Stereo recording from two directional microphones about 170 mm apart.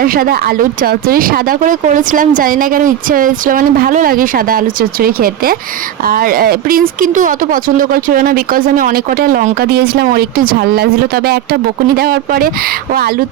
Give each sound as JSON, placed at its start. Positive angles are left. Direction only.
{"t": 0.0, "sound": "speech", "side_deg": -60}
{"t": 9.6, "sound": "speech", "side_deg": -70}